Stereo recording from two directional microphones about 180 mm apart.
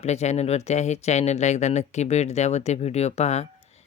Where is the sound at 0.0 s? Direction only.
40° left (ahead or behind).